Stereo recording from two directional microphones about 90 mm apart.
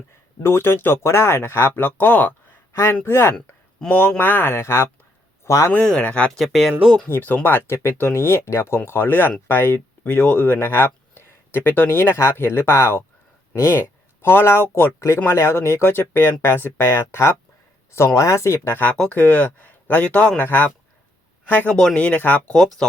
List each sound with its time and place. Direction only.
0.4 s speech: 25° left (ahead or behind)
5.7 s speech: 10° left (ahead or behind)
6.4 s speech: centre (ahead or behind)
7.1 s speech: 20° left (ahead or behind)
18.9 s speech: 15° left (ahead or behind)